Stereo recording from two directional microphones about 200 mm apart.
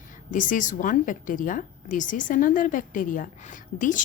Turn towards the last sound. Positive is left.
turn(degrees=40)  # may be behind; listen again after turning